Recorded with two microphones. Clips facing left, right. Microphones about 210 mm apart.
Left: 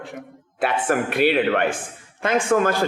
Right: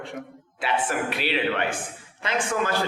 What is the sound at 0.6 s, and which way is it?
A man's voice, 50° left (ahead or behind).